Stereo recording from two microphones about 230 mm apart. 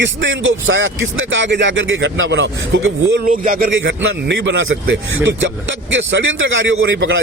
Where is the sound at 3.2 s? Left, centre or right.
Right.